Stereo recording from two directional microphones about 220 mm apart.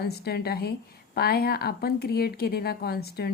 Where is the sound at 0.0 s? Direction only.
45° left (ahead or behind).